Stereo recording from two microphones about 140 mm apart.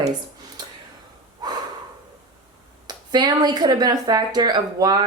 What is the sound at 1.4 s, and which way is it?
Snort, 30° right (ahead or behind).